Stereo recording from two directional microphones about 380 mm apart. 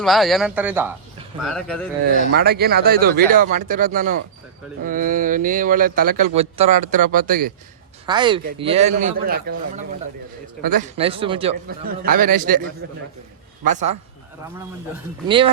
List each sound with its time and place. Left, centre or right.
0.0 s a man's voice: centre
2.3 s a man's voice: right
8.0 s a man's voice: centre
10.6 s a man's voice: centre
13.7 s a man's voice: centre